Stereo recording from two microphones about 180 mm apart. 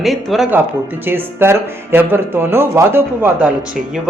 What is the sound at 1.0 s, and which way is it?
Speech, 10° right (ahead or behind).